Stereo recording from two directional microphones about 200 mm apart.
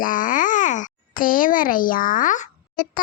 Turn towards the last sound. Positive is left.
turn(degrees=40)  # may be behind; listen again after turning